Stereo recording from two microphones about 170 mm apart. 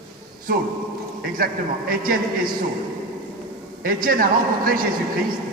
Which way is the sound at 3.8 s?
55° right (ahead or behind).